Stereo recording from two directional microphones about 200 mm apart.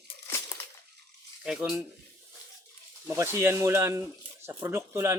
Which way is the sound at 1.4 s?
5° right (ahead or behind).